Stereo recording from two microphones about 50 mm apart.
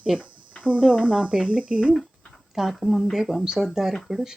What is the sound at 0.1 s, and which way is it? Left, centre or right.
Speech, centre.